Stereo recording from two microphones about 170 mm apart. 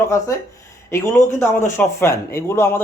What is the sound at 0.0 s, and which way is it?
A man's voice, 20° left (ahead or behind).